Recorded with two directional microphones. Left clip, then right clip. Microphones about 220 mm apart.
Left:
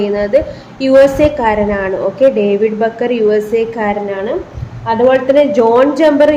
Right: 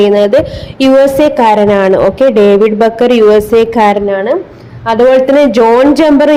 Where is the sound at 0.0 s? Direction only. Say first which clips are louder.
Right 6 dB; 35° right (ahead or behind).